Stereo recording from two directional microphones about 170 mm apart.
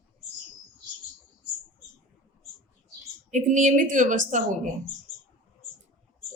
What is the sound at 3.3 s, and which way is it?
A man's voice, 45° right (ahead or behind).